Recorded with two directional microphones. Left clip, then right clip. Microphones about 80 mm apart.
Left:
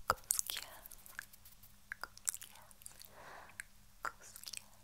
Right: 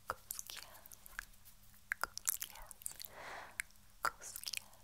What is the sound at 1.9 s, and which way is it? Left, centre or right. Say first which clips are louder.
Chewing: right 5 dB; right.